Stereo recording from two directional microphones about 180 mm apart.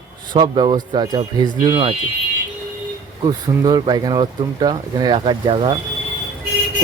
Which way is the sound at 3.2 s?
25° right (ahead or behind).